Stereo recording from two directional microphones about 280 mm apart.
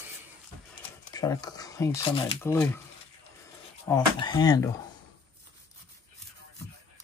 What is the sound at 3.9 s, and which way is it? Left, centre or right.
Speech, centre.